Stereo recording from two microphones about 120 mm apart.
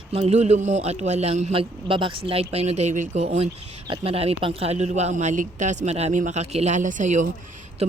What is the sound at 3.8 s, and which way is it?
A man's voice, 50° right (ahead or behind).